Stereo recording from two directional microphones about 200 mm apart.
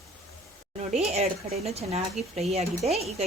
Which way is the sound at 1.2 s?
30° right (ahead or behind).